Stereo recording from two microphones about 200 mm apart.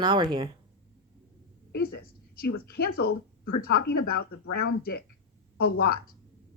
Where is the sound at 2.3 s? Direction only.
50° left (ahead or behind).